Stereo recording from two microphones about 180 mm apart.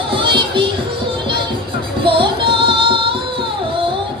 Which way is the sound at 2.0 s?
30° right (ahead or behind).